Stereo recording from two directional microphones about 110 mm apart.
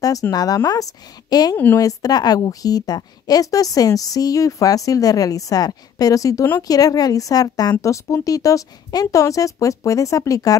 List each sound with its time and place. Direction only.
0.0 s a woman's voice: 35° left (ahead or behind)